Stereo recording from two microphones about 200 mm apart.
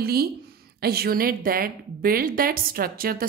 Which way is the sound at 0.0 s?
50° right (ahead or behind).